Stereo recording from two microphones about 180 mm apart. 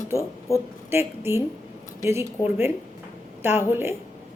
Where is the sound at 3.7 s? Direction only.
15° right (ahead or behind).